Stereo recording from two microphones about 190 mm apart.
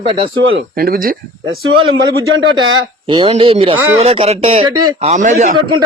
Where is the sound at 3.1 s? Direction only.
25° right (ahead or behind).